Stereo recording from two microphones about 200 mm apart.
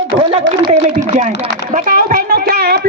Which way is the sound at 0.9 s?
35° right (ahead or behind).